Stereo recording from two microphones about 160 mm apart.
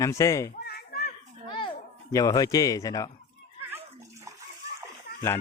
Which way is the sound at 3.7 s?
20° right (ahead or behind).